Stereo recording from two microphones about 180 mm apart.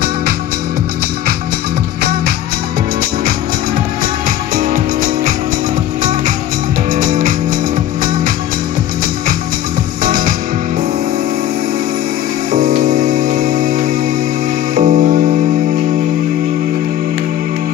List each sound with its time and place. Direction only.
4.6 s music: 50° right (ahead or behind)
7.0 s music: 50° right (ahead or behind)
10.0 s music: 50° right (ahead or behind)
12.5 s music: 50° right (ahead or behind)